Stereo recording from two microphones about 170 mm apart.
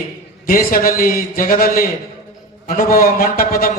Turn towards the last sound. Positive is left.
turn(degrees=60)  # may be behind; listen again after turning